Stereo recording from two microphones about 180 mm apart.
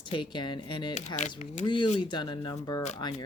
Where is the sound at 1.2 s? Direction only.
45° left (ahead or behind).